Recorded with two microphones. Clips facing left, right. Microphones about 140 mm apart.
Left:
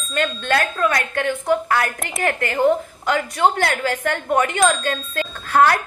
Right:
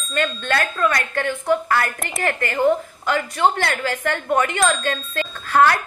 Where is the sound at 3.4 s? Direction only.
50° left (ahead or behind).